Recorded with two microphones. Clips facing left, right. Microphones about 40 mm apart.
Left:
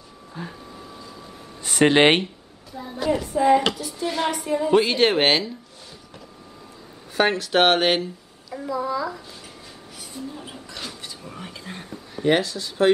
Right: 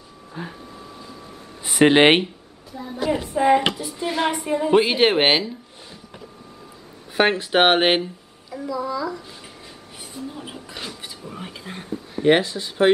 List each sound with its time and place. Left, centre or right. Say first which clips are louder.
0.3 s a sound: right 2 dB; centre
1.6 s speech: right 2 dB; centre
2.7 s a child's voice: right 2 dB; centre
3.2 s a woman's voice: even; right
7.2 s speech: right 1 dB; right
8.6 s a woman's voice: even; centre
10.1 s speech: right 2 dB; centre
11.3 s whispering: right 2 dB; centre
11.9 s speech: right 3 dB; right